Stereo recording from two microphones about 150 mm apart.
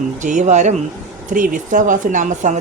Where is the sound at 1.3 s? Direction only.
60° right (ahead or behind).